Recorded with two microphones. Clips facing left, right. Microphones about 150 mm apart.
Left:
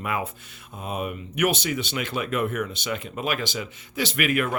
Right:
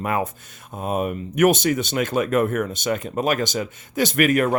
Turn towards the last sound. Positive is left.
turn(degrees=-40)  # may be behind; listen again after turning